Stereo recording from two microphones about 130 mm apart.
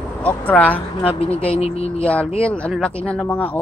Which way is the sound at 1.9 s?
10° left (ahead or behind).